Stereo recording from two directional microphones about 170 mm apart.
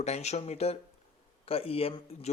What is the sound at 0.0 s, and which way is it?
Speech, 40° left (ahead or behind).